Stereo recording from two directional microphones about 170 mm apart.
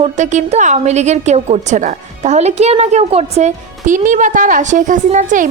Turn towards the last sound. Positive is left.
turn(degrees=-50)  # may be behind; listen again after turning